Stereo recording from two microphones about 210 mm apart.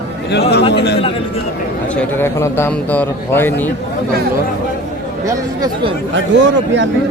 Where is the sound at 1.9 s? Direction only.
10° left (ahead or behind).